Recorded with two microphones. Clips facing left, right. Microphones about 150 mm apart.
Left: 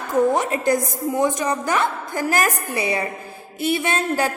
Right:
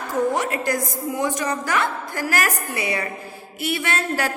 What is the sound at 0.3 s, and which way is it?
A woman's voice, 25° left (ahead or behind).